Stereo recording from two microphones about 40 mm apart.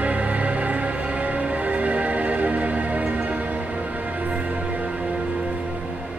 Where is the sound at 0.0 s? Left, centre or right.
Right.